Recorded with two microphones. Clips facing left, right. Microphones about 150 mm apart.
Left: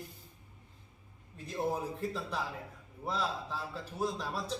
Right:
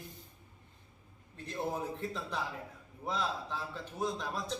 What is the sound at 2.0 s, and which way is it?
A man's voice, 5° left (ahead or behind).